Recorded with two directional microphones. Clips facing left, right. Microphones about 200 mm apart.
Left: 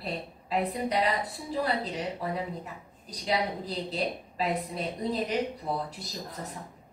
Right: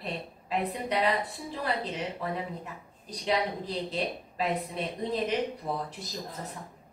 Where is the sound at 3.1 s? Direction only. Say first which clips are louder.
Right 1 dB; 40° left (ahead or behind).